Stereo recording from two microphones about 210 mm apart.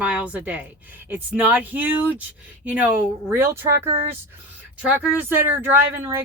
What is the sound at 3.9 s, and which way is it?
Speech, 30° right (ahead or behind).